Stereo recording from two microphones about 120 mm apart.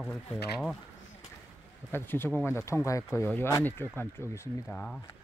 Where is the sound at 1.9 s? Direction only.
20° left (ahead or behind).